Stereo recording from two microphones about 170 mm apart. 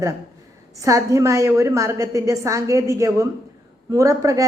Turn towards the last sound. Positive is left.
turn(degrees=-20)  # may be behind; listen again after turning